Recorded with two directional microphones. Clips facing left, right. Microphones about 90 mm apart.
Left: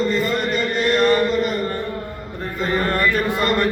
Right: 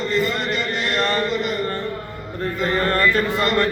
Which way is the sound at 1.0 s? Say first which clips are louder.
Left 5 dB; 10° left (ahead or behind).